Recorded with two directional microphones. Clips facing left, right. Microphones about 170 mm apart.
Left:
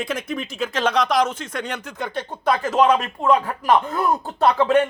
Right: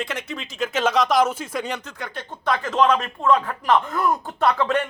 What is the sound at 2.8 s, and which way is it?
Speech, 15° left (ahead or behind).